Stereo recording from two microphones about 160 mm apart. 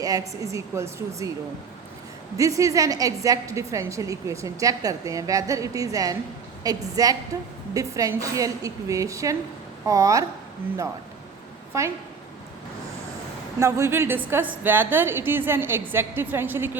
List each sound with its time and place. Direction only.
0.0 s a woman's voice: 20° right (ahead or behind)
2.4 s a woman's voice: 20° right (ahead or behind)
11.7 s a woman's voice: 20° right (ahead or behind)
13.6 s a woman's voice: 20° right (ahead or behind)